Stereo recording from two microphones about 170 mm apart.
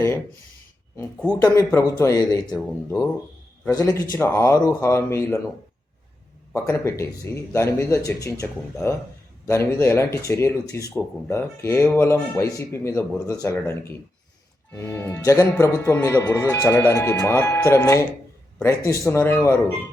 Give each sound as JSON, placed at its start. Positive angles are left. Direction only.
{"t": 1.4, "sound": "speech", "side_deg": 20}
{"t": 3.7, "sound": "speech", "side_deg": 20}
{"t": 6.5, "sound": "speech", "side_deg": 15}